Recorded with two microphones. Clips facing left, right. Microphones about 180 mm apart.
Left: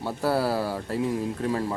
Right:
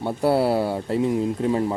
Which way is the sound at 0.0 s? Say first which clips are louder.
Right 5 dB; 25° right (ahead or behind).